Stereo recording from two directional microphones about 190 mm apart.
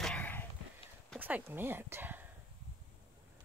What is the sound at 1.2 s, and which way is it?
Speech, 10° right (ahead or behind).